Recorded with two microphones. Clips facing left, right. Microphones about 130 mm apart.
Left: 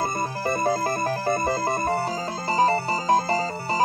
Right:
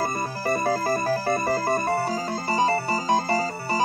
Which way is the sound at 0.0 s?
25° left (ahead or behind).